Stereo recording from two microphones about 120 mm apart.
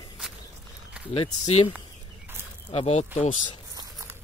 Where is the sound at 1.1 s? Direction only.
60° left (ahead or behind).